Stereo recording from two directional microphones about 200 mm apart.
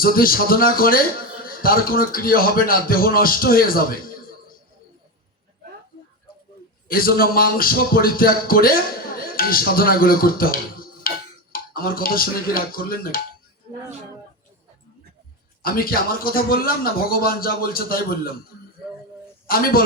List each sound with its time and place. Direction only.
0.0 s speech: 45° left (ahead or behind)
6.8 s a man's voice: 45° left (ahead or behind)
15.6 s speech: 45° left (ahead or behind)
19.5 s speech: 45° left (ahead or behind)